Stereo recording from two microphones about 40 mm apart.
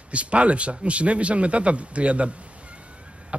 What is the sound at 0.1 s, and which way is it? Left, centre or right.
A man's voice, right.